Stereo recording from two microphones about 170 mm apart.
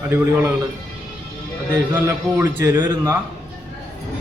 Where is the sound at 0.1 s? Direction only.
15° right (ahead or behind).